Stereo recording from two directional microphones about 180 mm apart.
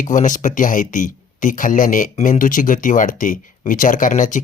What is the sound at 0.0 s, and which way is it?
Speech, 45° left (ahead or behind).